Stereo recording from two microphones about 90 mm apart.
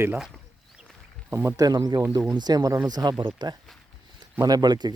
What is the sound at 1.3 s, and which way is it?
Speech, 30° right (ahead or behind).